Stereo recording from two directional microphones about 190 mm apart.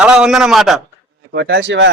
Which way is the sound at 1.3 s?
60° right (ahead or behind).